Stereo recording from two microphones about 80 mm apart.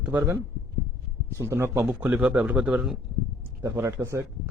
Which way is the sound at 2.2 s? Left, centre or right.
Centre.